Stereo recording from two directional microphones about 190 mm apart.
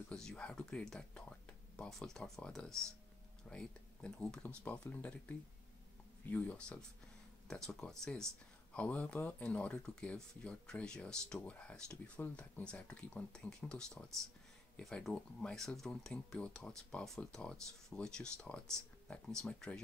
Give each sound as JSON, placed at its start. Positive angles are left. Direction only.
{"t": 0.1, "sound": "speech", "side_deg": 5}
{"t": 6.2, "sound": "speech", "side_deg": 10}